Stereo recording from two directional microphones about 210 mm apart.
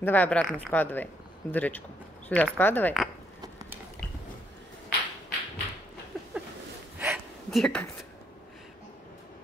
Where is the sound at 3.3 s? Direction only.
15° right (ahead or behind).